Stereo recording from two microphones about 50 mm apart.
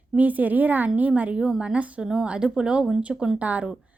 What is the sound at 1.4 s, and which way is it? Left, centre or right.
A woman's voice, centre.